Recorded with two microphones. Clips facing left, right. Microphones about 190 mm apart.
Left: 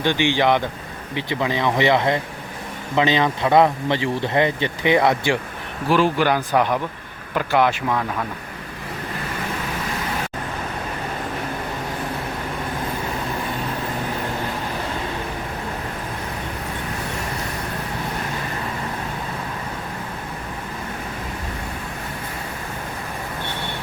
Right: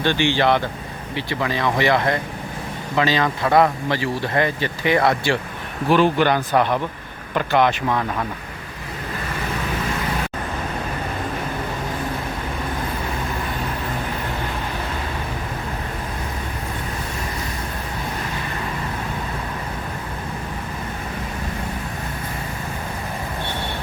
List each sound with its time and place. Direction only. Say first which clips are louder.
0.0 s speech: even; 15° left (ahead or behind)
5.9 s speech: right 1 dB; 5° left (ahead or behind)